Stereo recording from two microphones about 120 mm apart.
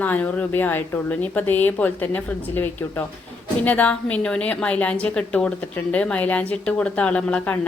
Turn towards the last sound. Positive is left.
turn(degrees=10)  # may be behind; listen again after turning